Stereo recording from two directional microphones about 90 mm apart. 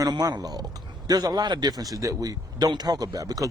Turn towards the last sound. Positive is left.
turn(degrees=-40)  # may be behind; listen again after turning